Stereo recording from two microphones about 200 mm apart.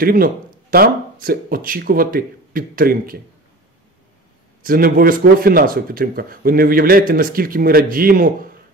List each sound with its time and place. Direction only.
0.0 s speech: 45° right (ahead or behind)
4.6 s speech: 45° right (ahead or behind)